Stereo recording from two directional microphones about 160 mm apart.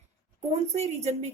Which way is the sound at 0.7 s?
40° right (ahead or behind).